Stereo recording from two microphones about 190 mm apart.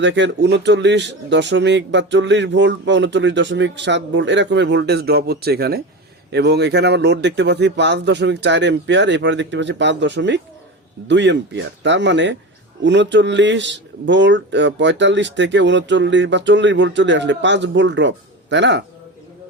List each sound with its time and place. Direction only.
0.0 s speech: 70° right (ahead or behind)